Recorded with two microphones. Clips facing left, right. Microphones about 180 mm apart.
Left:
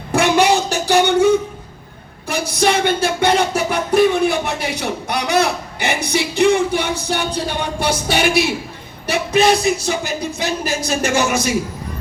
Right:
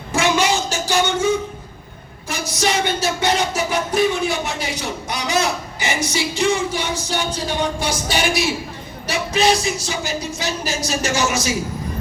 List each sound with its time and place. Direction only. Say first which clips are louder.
0.1 s a sound: left 4 dB; 60° left (ahead or behind)
2.3 s music: left 4 dB; 60° left (ahead or behind)
9.0 s speech: left 3 dB; 60° left (ahead or behind)